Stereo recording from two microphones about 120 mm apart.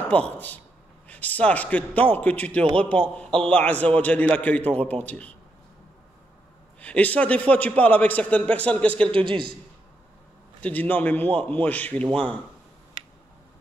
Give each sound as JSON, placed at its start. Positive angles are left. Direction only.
{"t": 0.1, "sound": "a man's voice", "side_deg": 10}
{"t": 6.8, "sound": "a man's voice", "side_deg": 10}
{"t": 9.1, "sound": "a man's voice", "side_deg": -45}
{"t": 10.6, "sound": "a man's voice", "side_deg": 15}